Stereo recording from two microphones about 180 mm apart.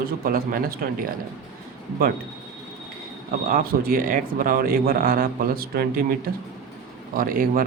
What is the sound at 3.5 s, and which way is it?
Speech, 55° right (ahead or behind).